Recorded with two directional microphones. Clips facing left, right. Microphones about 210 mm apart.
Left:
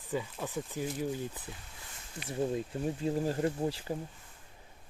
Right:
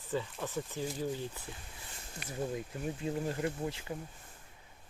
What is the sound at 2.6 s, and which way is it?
Speech, 30° left (ahead or behind).